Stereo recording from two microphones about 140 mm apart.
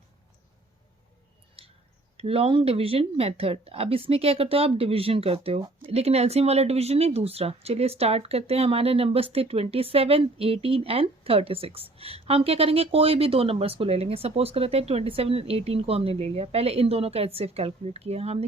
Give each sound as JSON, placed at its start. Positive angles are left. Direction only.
{"t": 1.6, "sound": "clicking", "side_deg": -45}
{"t": 2.1, "sound": "speech", "side_deg": -45}